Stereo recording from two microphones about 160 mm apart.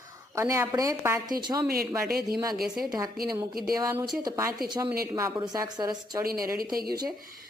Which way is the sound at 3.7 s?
20° right (ahead or behind).